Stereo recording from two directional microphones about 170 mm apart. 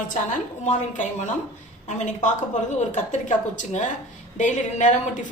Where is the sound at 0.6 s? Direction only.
45° left (ahead or behind).